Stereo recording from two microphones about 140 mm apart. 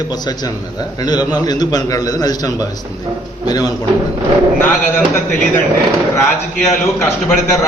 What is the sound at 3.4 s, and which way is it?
Speech, 25° left (ahead or behind).